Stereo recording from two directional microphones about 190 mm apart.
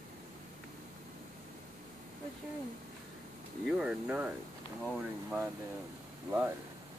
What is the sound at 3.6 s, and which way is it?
Speech, 5° right (ahead or behind).